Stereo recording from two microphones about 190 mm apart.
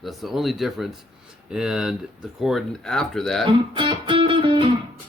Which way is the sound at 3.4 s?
25° right (ahead or behind).